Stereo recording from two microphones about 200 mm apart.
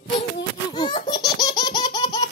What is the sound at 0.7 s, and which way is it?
Laughter, 20° left (ahead or behind).